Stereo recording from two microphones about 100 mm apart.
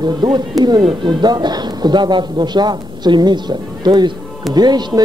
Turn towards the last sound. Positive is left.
turn(degrees=-45)  # may be behind; listen again after turning